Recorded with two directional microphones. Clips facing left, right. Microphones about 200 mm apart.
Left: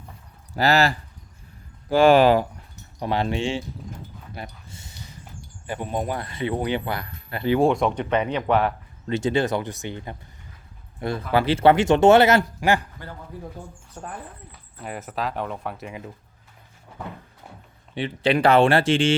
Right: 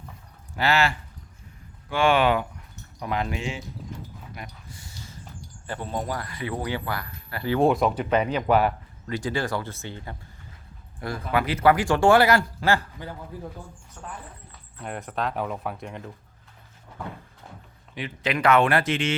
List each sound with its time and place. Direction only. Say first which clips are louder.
0.5 s speech: left 4 dB; 40° left (ahead or behind)
4.4 s a sound: left 6 dB; 25° left (ahead or behind)
5.6 s speech: left 3 dB; 15° left (ahead or behind)
7.6 s speech: right 2 dB; centre (ahead or behind)
9.0 s speech: left 6 dB; 25° left (ahead or behind)
14.0 s speech: left 4 dB; 35° left (ahead or behind)
14.8 s speech: even; 5° left (ahead or behind)
17.9 s speech: left 7 dB; 30° left (ahead or behind)